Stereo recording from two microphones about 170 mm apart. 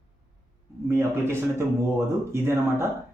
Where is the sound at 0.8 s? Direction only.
15° right (ahead or behind).